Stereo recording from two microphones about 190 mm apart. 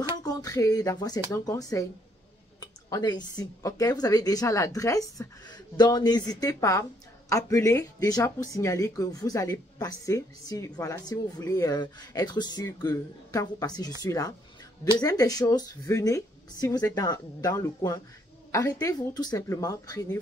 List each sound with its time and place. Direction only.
0.1 s speech: 20° left (ahead or behind)